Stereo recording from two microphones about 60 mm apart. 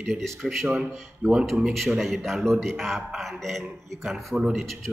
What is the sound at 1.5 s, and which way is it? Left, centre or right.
Speech, centre.